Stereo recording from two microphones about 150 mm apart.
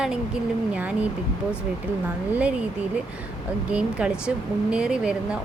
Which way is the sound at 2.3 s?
10° right (ahead or behind).